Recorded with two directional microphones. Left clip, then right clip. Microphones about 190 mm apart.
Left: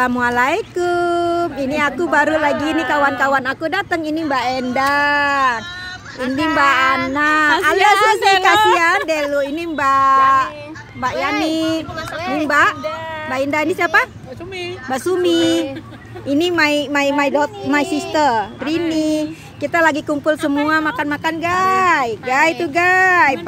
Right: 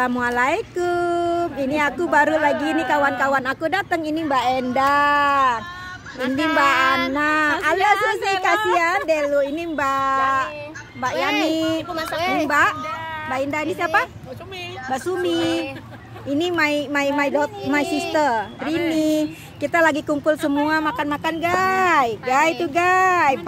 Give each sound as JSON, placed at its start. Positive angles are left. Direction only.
{"t": 0.0, "sound": "speech", "side_deg": 5}
{"t": 7.9, "sound": "a woman's voice", "side_deg": 50}
{"t": 8.7, "sound": "speech", "side_deg": 5}
{"t": 11.1, "sound": "a woman's voice", "side_deg": -60}
{"t": 11.5, "sound": "speech", "side_deg": 0}
{"t": 12.1, "sound": "a woman's voice", "side_deg": -55}
{"t": 12.4, "sound": "a woman's voice", "side_deg": 5}
{"t": 16.3, "sound": "a woman's voice", "side_deg": 10}
{"t": 22.3, "sound": "speech", "side_deg": 0}